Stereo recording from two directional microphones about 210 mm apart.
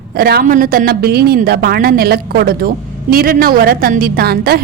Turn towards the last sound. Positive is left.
turn(degrees=-45)  # may be behind; listen again after turning